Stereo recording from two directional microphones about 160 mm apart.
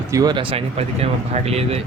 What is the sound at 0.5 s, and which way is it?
Speech, 40° right (ahead or behind).